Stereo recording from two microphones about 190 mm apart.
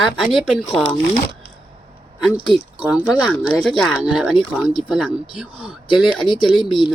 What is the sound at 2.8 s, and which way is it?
Speech, 5° right (ahead or behind).